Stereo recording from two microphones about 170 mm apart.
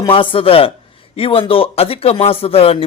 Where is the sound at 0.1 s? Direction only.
30° left (ahead or behind).